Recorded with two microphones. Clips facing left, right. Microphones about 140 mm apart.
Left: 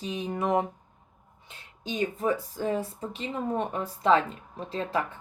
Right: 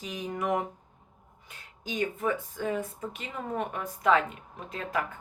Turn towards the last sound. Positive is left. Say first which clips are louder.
# left 3 dB
turn(degrees=30)  # may be behind; listen again after turning